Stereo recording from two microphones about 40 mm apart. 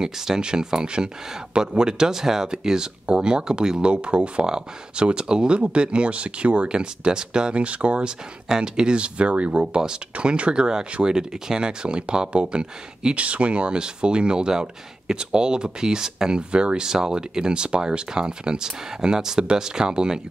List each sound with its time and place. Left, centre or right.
0.0 s speech: centre
3.8 s speech: right
7.6 s speech: right
8.5 s speech: centre